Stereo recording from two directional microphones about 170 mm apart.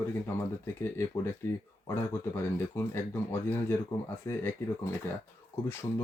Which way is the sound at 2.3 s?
15° left (ahead or behind).